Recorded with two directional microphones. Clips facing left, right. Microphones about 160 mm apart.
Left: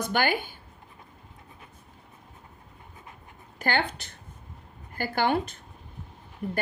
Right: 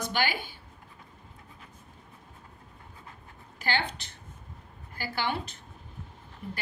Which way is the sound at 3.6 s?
50° left (ahead or behind).